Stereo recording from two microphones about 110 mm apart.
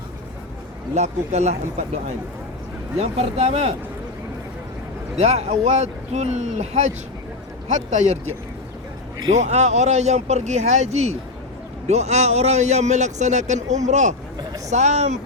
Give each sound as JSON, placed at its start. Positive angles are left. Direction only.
{"t": 0.9, "sound": "a man's voice", "side_deg": -90}
{"t": 3.0, "sound": "speech", "side_deg": -70}
{"t": 5.2, "sound": "a man's voice", "side_deg": -85}
{"t": 9.3, "sound": "a man's voice", "side_deg": -90}